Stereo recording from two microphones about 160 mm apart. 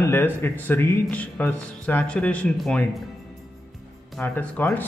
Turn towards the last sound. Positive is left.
turn(degrees=10)  # may be behind; listen again after turning